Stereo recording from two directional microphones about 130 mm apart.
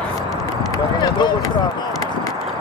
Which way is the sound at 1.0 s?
35° left (ahead or behind).